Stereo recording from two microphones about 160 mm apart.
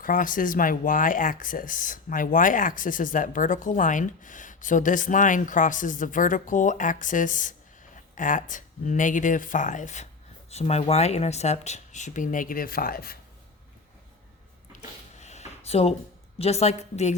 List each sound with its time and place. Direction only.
0.0 s speech: 55° left (ahead or behind)
14.7 s a sound: 50° left (ahead or behind)
16.4 s speech: 40° left (ahead or behind)